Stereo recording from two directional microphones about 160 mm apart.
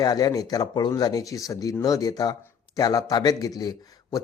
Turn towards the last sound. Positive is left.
turn(degrees=25)  # may be behind; listen again after turning